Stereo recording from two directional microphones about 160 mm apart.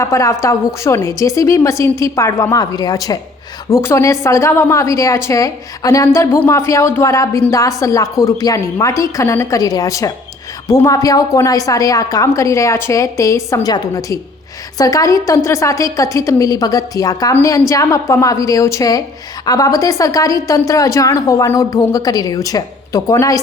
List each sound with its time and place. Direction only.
0.0 s a woman's voice: 20° left (ahead or behind)